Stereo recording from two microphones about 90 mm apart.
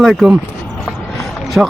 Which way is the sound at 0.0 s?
5° right (ahead or behind).